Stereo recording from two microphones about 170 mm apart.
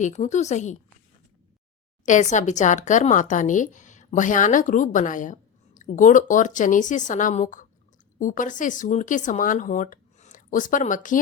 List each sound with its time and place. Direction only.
0.0 s speech: 45° left (ahead or behind)
2.0 s speech: 45° left (ahead or behind)